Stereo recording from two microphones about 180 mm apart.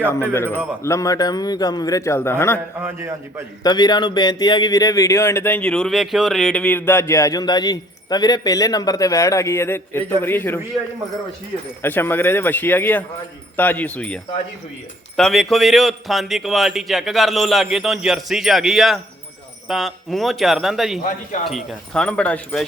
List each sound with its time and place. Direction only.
0.8 s speech: 15° left (ahead or behind)
2.8 s a man's voice: 15° right (ahead or behind)
3.6 s speech: 25° left (ahead or behind)
11.8 s a man's voice: 10° left (ahead or behind)